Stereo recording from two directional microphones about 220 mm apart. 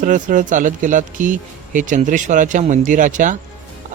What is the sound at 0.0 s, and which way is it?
Speech, 35° right (ahead or behind).